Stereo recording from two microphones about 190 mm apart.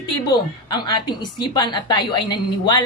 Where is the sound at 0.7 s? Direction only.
25° left (ahead or behind).